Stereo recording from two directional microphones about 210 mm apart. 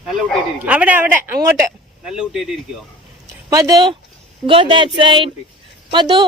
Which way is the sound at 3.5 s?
15° right (ahead or behind).